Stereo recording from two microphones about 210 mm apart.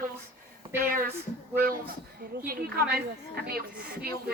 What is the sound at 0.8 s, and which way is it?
Speech, 45° right (ahead or behind).